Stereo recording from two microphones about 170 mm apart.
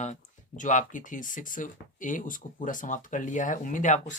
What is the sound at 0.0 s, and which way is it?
Speech, 45° left (ahead or behind).